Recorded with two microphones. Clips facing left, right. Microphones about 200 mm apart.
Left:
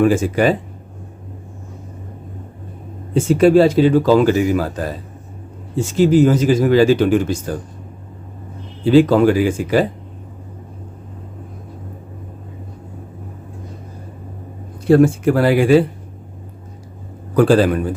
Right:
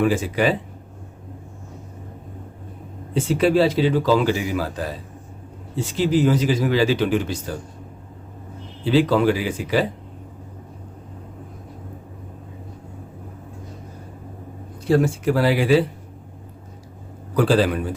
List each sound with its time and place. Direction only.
0.0 s a man's voice: 45° left (ahead or behind)
3.2 s a man's voice: 45° left (ahead or behind)
8.8 s a man's voice: 50° left (ahead or behind)
14.8 s a man's voice: 55° left (ahead or behind)
17.3 s a man's voice: 50° left (ahead or behind)